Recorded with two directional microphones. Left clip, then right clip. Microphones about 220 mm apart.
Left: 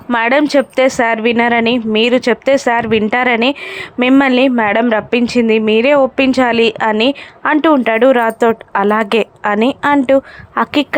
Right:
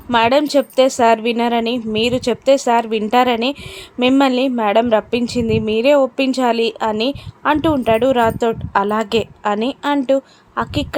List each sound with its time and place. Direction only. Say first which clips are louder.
0.1 s a woman's voice: left 2 dB; 15° left (ahead or behind)